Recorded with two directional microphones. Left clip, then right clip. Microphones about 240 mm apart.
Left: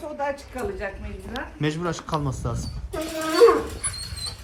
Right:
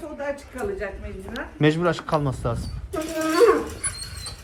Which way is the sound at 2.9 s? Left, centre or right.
Left.